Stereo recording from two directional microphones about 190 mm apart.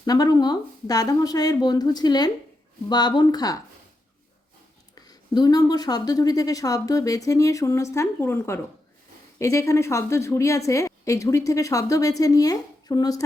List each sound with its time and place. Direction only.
0.0 s speech: 20° left (ahead or behind)
5.0 s a woman's voice: 20° left (ahead or behind)